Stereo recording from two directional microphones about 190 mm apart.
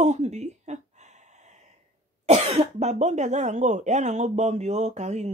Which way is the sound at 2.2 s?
35° right (ahead or behind).